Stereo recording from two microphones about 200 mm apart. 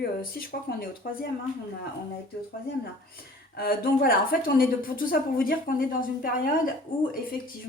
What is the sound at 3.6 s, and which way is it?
A woman's voice, 50° left (ahead or behind).